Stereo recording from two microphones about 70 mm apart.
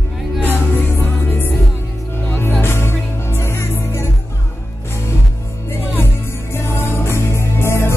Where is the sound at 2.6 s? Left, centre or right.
Left.